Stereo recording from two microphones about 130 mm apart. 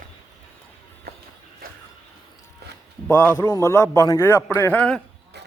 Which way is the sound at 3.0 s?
15° left (ahead or behind).